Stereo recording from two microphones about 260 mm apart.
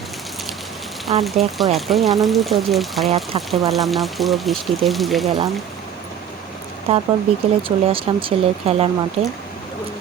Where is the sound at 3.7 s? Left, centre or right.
Centre.